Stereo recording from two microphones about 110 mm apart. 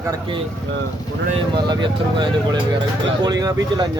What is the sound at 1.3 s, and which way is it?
Speech, 45° right (ahead or behind).